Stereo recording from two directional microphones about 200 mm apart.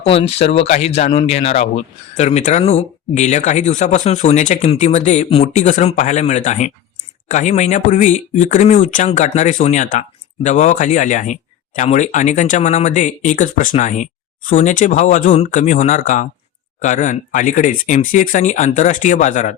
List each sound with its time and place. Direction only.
0.0 s speech: 30° left (ahead or behind)